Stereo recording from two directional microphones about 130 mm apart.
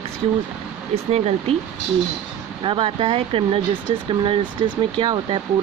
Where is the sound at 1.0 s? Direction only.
55° right (ahead or behind).